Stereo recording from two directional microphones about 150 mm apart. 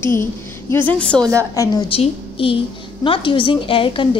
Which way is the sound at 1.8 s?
40° left (ahead or behind).